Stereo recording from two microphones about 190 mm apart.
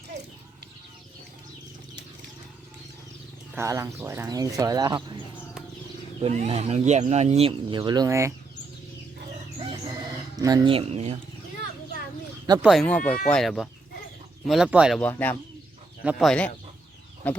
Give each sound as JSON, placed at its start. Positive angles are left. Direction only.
{"t": 3.5, "sound": "speech", "side_deg": -15}
{"t": 6.2, "sound": "speech", "side_deg": -35}
{"t": 10.3, "sound": "speech", "side_deg": -20}
{"t": 12.6, "sound": "speech", "side_deg": 0}
{"t": 15.0, "sound": "speech", "side_deg": 10}